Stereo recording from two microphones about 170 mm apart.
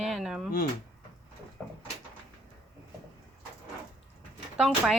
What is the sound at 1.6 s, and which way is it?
Sliding door, 5° left (ahead or behind).